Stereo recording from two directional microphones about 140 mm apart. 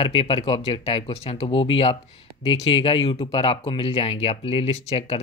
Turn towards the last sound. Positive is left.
turn(degrees=45)  # may be behind; listen again after turning